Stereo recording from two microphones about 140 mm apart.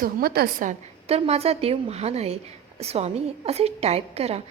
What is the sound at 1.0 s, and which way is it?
A woman's voice, 45° right (ahead or behind).